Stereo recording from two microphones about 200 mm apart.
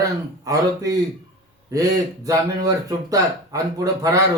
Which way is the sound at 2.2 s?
15° right (ahead or behind).